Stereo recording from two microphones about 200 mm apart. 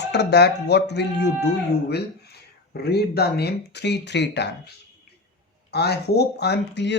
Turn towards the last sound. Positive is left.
turn(degrees=60)  # may be behind; listen again after turning